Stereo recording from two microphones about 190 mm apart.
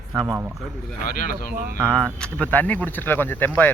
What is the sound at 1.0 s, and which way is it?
Speech, 45° left (ahead or behind).